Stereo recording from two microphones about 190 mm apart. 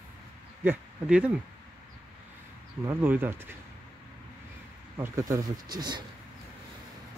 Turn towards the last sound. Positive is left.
turn(degrees=-20)  # may be behind; listen again after turning